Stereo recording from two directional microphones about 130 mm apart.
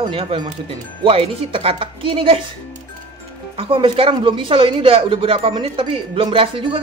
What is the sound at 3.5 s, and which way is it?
Speech, 40° right (ahead or behind).